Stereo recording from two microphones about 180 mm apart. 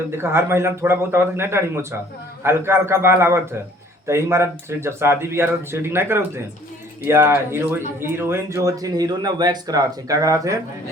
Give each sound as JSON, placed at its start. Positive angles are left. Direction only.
{"t": 0.2, "sound": "speech", "side_deg": -15}